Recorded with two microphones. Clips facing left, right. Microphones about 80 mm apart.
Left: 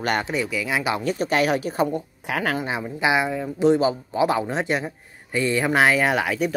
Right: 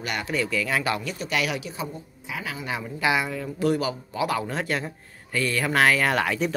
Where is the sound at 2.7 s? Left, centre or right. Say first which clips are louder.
Even; left.